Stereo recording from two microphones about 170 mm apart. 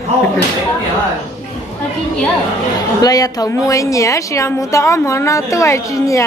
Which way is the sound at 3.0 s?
20° left (ahead or behind).